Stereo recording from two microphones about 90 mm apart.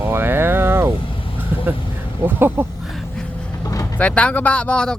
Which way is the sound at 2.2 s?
25° right (ahead or behind).